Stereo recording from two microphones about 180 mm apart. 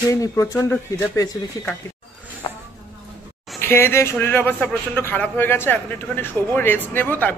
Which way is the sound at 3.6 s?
15° left (ahead or behind).